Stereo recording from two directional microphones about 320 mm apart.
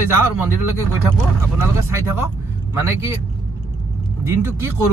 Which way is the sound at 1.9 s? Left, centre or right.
Centre.